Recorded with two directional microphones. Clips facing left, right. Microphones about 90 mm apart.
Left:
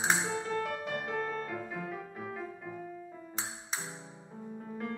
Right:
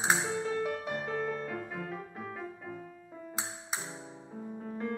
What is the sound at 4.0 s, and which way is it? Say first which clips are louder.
Music: right 3 dB; 15° right (ahead or behind).